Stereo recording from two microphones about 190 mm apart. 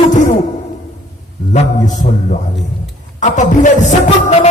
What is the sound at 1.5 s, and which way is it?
A man's voice, 40° left (ahead or behind).